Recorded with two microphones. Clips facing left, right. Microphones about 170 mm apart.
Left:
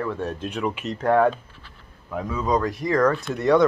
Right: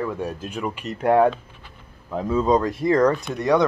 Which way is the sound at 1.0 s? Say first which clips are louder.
Right 2 dB; 15° right (ahead or behind).